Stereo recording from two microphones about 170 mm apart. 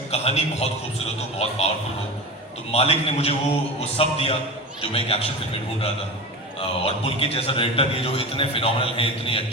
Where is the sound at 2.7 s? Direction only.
35° left (ahead or behind).